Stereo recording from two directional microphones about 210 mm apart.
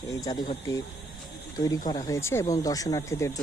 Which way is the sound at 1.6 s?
15° left (ahead or behind).